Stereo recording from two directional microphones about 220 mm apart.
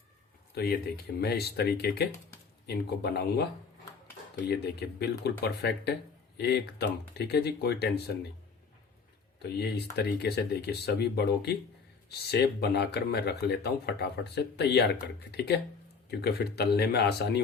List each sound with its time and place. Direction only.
0.5 s speech: 45° left (ahead or behind)
4.4 s speech: 50° left (ahead or behind)
9.4 s speech: 50° left (ahead or behind)